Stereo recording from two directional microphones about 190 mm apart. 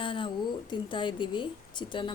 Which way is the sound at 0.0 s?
25° left (ahead or behind).